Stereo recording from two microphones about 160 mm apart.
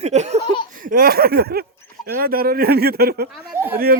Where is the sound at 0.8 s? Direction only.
60° right (ahead or behind); by 1.6 s 75° right (ahead or behind).